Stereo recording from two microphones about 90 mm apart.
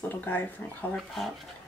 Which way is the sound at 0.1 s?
20° left (ahead or behind).